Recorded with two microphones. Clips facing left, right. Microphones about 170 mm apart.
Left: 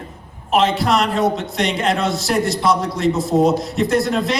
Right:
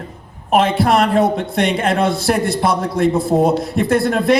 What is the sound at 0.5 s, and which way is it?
A man's voice, 55° right (ahead or behind).